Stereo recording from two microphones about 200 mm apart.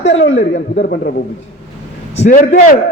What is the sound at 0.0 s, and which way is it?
Speech, 65° left (ahead or behind).